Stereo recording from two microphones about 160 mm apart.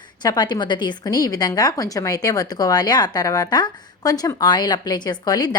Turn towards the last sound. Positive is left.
turn(degrees=25)  # may be behind; listen again after turning